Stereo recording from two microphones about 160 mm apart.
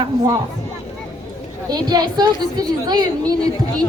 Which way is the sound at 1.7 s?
25° right (ahead or behind).